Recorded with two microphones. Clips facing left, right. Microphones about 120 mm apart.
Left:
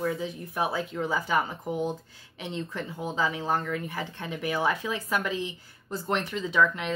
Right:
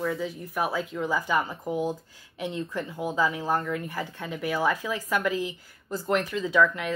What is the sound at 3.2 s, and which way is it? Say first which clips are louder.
Speech: right 1 dB; 20° left (ahead or behind).